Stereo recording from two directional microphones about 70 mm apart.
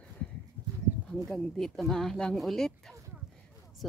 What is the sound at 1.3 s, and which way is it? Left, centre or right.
Speech, centre.